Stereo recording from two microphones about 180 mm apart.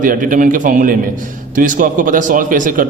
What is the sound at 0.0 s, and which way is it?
A man's voice, 50° right (ahead or behind).